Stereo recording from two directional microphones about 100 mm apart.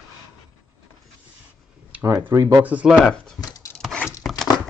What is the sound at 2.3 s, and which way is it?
Speech, 35° right (ahead or behind).